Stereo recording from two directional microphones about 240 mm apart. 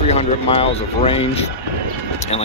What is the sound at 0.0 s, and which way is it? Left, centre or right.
Speech, left.